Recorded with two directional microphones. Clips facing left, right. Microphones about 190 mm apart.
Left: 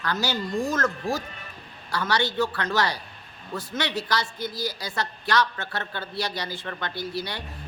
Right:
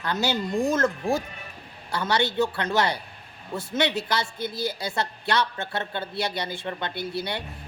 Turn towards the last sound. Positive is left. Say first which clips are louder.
# right 1 dB
turn(degrees=-25)  # may be behind; listen again after turning